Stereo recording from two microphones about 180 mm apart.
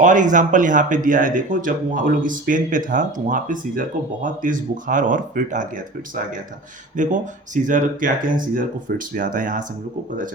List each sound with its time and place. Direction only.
0.0 s speech: 45° right (ahead or behind)
6.9 s speech: 45° right (ahead or behind)